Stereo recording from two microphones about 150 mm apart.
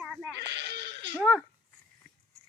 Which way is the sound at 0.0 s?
5° right (ahead or behind).